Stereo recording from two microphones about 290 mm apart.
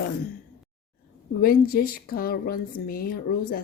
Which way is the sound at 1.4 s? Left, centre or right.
Left.